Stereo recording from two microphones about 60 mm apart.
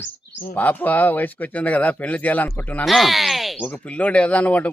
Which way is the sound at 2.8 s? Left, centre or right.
Centre.